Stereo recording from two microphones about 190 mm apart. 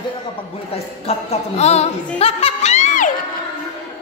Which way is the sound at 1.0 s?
35° left (ahead or behind).